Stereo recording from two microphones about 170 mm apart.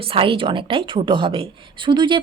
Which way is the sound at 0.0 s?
30° right (ahead or behind).